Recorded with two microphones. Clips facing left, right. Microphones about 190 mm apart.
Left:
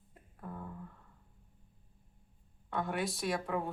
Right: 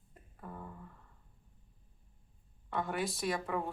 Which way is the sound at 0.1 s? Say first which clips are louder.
Left 2 dB; centre (ahead or behind).